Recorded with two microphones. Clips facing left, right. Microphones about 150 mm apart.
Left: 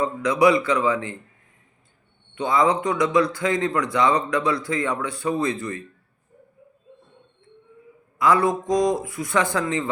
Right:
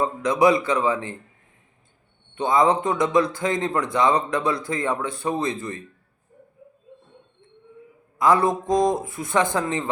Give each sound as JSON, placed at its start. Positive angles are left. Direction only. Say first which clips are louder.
{"t": 0.0, "sound": "speech", "louder": "even", "side_deg": -25}
{"t": 2.4, "sound": "speech", "louder": "right 1 dB", "side_deg": -20}
{"t": 8.2, "sound": "speech", "louder": "even", "side_deg": -25}